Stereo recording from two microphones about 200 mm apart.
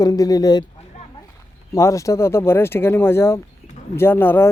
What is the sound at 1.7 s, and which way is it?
Speech, 15° left (ahead or behind).